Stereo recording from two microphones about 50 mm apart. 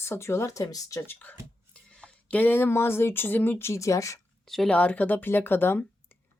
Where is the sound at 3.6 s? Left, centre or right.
Left.